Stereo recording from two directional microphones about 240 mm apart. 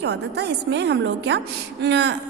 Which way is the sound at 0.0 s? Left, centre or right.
Right.